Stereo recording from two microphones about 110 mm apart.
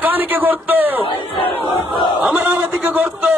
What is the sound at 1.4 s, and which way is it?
Battle cry, 55° left (ahead or behind).